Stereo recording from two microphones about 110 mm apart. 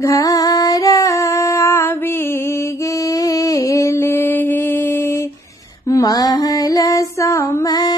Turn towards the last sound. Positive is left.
turn(degrees=35)  # may be behind; listen again after turning